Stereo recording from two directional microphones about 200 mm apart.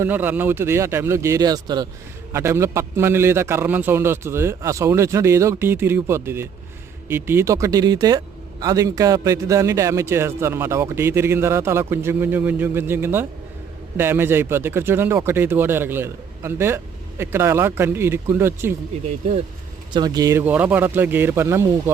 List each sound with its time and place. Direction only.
0.0 s speech: 10° right (ahead or behind)
19.9 s speech: 20° right (ahead or behind)